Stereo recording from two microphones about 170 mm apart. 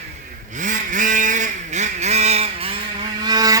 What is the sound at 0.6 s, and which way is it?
Vehicle, 50° right (ahead or behind).